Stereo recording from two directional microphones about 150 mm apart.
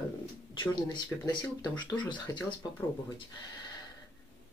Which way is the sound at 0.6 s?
30° left (ahead or behind).